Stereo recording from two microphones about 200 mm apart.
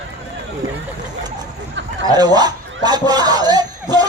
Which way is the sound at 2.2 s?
20° right (ahead or behind).